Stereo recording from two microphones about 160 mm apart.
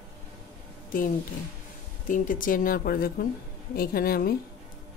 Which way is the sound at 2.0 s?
55° left (ahead or behind).